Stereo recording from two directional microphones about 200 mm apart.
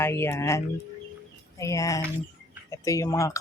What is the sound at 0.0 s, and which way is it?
Speech, 10° left (ahead or behind).